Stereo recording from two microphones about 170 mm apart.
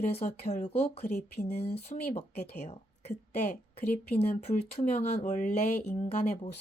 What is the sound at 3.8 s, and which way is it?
Speech, 55° left (ahead or behind).